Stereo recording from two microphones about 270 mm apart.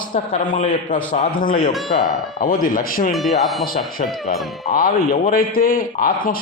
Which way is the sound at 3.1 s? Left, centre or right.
Centre.